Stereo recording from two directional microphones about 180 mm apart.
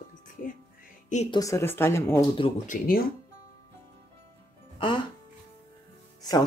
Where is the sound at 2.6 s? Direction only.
50° left (ahead or behind).